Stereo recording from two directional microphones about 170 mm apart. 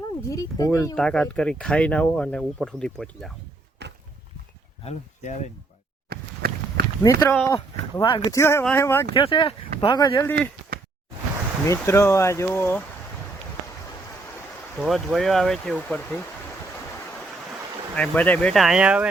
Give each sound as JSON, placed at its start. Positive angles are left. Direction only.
{"t": 0.3, "sound": "speech", "side_deg": 20}
{"t": 0.9, "sound": "speech", "side_deg": 5}
{"t": 4.9, "sound": "speech", "side_deg": 45}
{"t": 6.1, "sound": "a sound", "side_deg": -65}
{"t": 7.0, "sound": "speech", "side_deg": 15}
{"t": 8.0, "sound": "speech", "side_deg": 30}
{"t": 8.4, "sound": "speech", "side_deg": 15}
{"t": 9.1, "sound": "speech", "side_deg": 30}
{"t": 11.7, "sound": "speech", "side_deg": 15}
{"t": 14.8, "sound": "speech", "side_deg": 0}
{"t": 17.9, "sound": "speech", "side_deg": 10}